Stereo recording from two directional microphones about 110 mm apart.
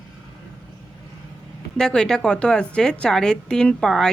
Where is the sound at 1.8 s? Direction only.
5° left (ahead or behind).